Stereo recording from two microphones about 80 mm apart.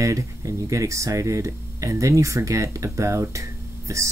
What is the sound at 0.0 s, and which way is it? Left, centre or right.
Speech, right.